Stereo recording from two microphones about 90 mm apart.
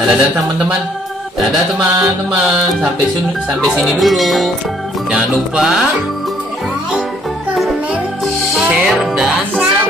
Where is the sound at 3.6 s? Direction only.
Centre (ahead or behind).